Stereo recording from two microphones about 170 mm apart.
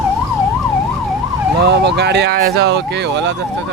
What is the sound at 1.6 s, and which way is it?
Speech, 85° right.